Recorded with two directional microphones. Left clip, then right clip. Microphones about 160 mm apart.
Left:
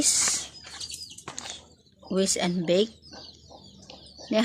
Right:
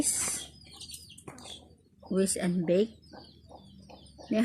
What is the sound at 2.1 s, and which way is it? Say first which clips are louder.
Speech: left 4 dB; 20° right (ahead or behind).